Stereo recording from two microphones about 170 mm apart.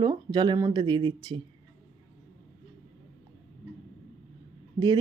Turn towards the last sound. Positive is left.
turn(degrees=-35)  # may be behind; listen again after turning